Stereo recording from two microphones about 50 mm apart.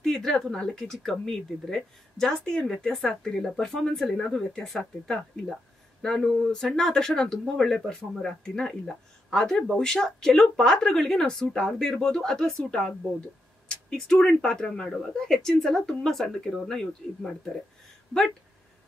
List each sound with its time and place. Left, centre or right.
0.0 s speech: centre
13.8 s speech: centre